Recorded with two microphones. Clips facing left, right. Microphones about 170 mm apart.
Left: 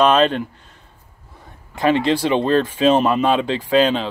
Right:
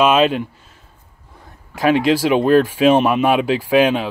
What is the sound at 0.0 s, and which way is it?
Speech, 5° right (ahead or behind).